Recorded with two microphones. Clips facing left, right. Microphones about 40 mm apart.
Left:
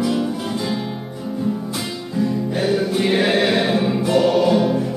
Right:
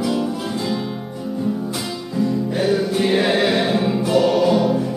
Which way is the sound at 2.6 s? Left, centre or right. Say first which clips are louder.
Even; centre.